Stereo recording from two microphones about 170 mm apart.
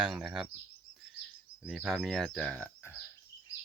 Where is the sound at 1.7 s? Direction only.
Centre (ahead or behind).